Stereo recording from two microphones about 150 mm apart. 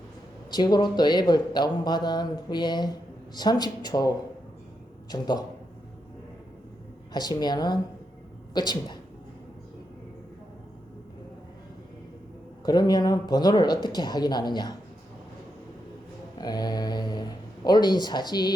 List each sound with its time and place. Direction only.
0.5 s speech: 30° left (ahead or behind)
5.1 s speech: 30° left (ahead or behind)
7.1 s speech: 25° left (ahead or behind)
12.6 s speech: 30° left (ahead or behind)
16.4 s speech: 25° left (ahead or behind)